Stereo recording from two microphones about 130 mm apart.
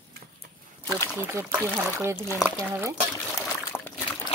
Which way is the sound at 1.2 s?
20° right (ahead or behind).